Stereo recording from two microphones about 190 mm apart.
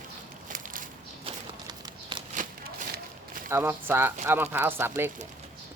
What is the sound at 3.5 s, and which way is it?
Speech, 10° right (ahead or behind).